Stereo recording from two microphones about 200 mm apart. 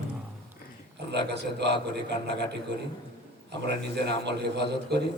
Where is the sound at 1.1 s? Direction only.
60° right (ahead or behind).